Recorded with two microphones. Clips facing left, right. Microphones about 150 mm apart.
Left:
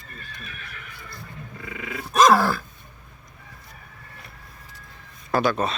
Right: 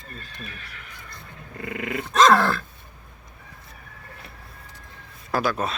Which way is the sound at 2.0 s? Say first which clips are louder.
Even; 10° left (ahead or behind).